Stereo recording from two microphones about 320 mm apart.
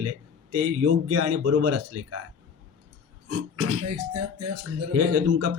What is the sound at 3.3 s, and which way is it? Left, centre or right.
Speech, right.